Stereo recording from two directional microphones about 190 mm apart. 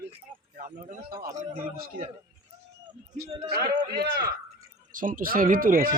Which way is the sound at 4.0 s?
55° right (ahead or behind).